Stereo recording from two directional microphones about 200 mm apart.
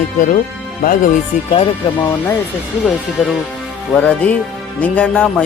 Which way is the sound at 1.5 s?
30° left (ahead or behind).